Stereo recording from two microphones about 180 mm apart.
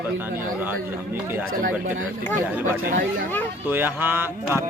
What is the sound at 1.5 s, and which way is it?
Speech, 50° right (ahead or behind).